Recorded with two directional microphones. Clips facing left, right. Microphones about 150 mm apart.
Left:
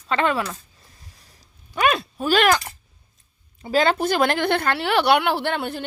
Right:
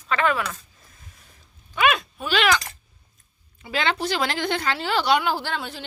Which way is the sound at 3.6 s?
40° left (ahead or behind).